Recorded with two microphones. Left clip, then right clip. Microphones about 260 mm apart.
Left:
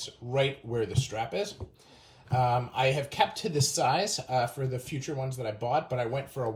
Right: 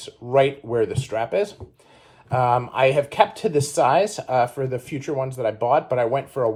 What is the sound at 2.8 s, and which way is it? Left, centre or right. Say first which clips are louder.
Speech: right 10 dB; centre.